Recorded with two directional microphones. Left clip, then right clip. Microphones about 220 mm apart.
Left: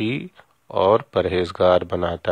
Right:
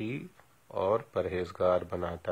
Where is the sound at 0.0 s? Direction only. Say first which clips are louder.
Left 12 dB; 40° left (ahead or behind).